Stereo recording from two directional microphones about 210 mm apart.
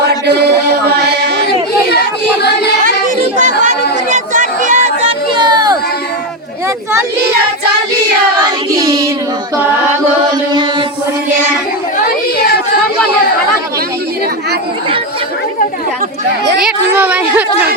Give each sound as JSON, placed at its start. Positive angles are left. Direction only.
{"t": 0.1, "sound": "chant", "side_deg": -50}
{"t": 4.1, "sound": "a sound", "side_deg": -35}
{"t": 5.4, "sound": "child singing", "side_deg": -20}
{"t": 8.4, "sound": "child singing", "side_deg": -20}
{"t": 16.6, "sound": "a woman's voice", "side_deg": -5}